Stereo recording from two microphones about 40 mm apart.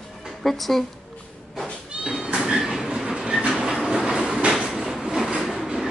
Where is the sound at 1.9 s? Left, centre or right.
Centre.